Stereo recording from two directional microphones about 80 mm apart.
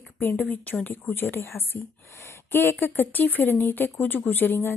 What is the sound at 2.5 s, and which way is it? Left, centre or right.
Speech, left.